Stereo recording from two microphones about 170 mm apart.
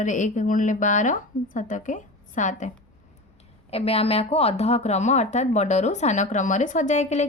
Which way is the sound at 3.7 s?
35° left (ahead or behind).